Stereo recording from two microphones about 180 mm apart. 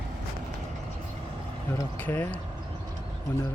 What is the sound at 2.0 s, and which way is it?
Speech, 10° left (ahead or behind).